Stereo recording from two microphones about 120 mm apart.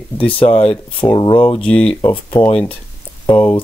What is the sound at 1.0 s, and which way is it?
Speech, 40° left (ahead or behind).